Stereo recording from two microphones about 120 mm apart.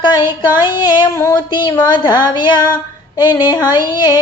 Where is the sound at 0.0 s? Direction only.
40° left (ahead or behind).